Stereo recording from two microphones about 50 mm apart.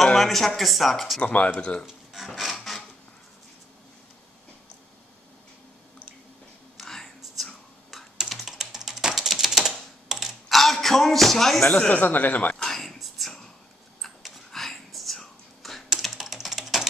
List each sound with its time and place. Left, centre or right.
0.0 s speech: centre
1.2 s speech: left
1.9 s filing: centre
6.8 s whispering: centre
7.9 s typing: centre
11.9 s a man's voice: left
12.6 s a sound: centre
14.2 s whispering: centre
16.0 s typing: centre